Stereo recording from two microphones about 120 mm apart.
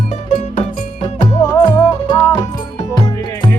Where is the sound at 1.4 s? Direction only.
30° left (ahead or behind).